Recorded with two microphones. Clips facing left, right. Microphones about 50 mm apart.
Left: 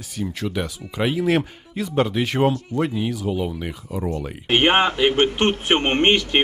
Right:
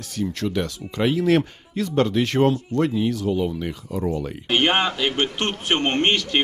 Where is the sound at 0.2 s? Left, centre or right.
Centre.